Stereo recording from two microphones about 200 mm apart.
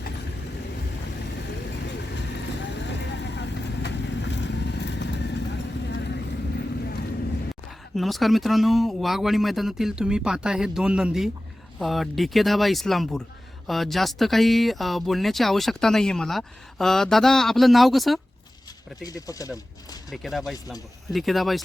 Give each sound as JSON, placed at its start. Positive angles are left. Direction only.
{"t": 2.1, "sound": "vehicle", "side_deg": 60}
{"t": 7.9, "sound": "speech", "side_deg": 0}
{"t": 19.0, "sound": "speech", "side_deg": 15}
{"t": 20.1, "sound": "speech", "side_deg": 0}